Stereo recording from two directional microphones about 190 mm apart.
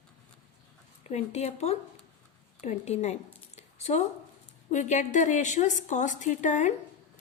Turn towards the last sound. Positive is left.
turn(degrees=40)  # may be behind; listen again after turning